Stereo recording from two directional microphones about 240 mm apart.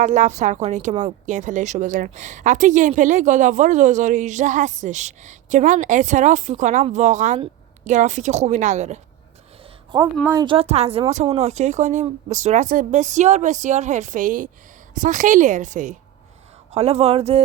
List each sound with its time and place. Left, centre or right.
0.0 s speech: right
9.9 s a woman's voice: centre